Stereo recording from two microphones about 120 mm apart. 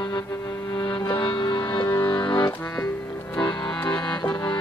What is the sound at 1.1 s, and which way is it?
Music, 40° left (ahead or behind).